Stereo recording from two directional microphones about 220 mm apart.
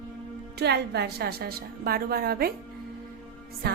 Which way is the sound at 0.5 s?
50° right (ahead or behind).